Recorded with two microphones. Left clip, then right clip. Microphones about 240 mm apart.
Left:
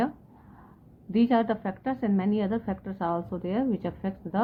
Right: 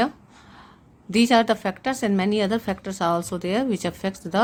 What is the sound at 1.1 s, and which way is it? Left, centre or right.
A woman's voice, right.